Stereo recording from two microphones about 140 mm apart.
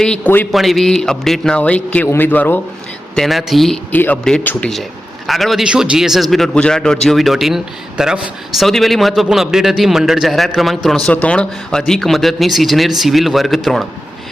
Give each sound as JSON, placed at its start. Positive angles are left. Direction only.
{"t": 0.0, "sound": "a man's voice", "side_deg": 10}
{"t": 3.2, "sound": "a man's voice", "side_deg": 0}
{"t": 3.9, "sound": "a man's voice", "side_deg": 10}